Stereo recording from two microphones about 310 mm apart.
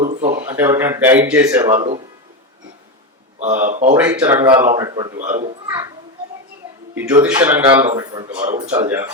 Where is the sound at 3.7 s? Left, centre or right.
Right.